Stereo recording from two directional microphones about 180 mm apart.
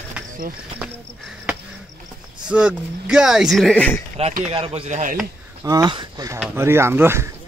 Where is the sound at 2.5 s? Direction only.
5° right (ahead or behind).